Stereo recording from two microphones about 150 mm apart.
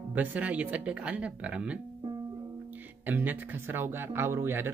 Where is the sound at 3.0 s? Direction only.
10° right (ahead or behind).